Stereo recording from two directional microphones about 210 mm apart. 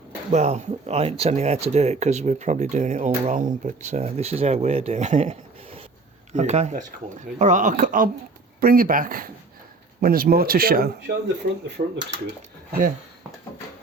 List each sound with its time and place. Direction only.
0.3 s speech: 30° right (ahead or behind); by 11.6 s 50° right (ahead or behind)